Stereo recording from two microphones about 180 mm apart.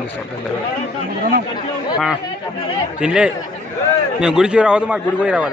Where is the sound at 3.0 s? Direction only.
5° right (ahead or behind).